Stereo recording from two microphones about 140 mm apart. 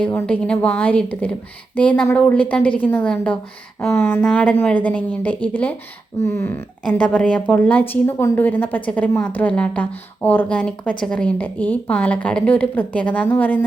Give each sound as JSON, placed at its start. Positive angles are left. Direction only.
{"t": 0.0, "sound": "a woman's voice", "side_deg": 10}
{"t": 6.8, "sound": "a woman's voice", "side_deg": 5}